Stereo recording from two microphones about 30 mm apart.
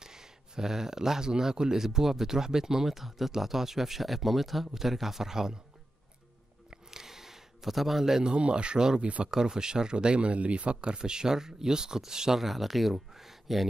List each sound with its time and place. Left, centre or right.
0.0 s speech: centre
6.7 s a sound: centre
8.0 s speech: centre
8.3 s speech: right; by 12.4 s centre
12.4 s speech: centre